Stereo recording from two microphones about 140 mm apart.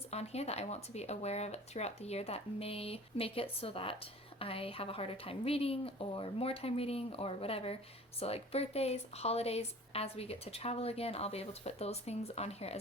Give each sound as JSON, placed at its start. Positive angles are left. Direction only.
{"t": 0.1, "sound": "speech", "side_deg": 50}